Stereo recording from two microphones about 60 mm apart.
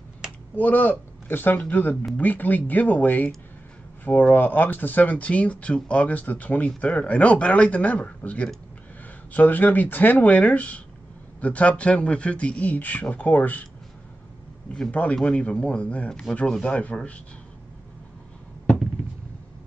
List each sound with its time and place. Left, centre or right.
0.6 s a man's voice: left
14.9 s speech: left
16.1 s speech: centre